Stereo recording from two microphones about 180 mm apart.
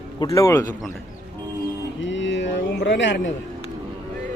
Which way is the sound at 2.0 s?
90° left.